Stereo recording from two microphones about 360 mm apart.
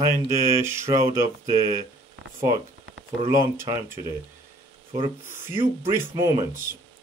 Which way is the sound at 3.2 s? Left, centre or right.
Centre.